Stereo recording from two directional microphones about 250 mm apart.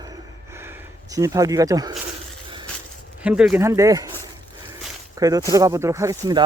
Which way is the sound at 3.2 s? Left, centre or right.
Centre.